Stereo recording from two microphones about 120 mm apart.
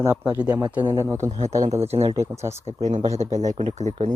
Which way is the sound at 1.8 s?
60° right (ahead or behind).